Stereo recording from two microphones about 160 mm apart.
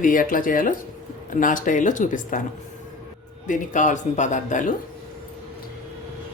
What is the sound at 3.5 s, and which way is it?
Speech, 50° left (ahead or behind).